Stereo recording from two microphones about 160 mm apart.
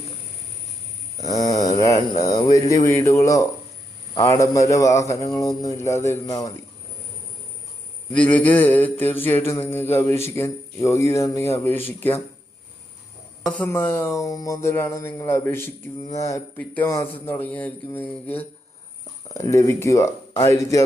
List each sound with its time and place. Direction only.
1.2 s a man's voice: 25° left (ahead or behind)
8.1 s music: 10° left (ahead or behind)
13.7 s music: 15° left (ahead or behind)
19.3 s a man's voice: 20° left (ahead or behind)